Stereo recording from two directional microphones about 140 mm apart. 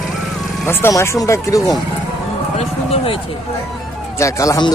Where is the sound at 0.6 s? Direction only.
15° left (ahead or behind).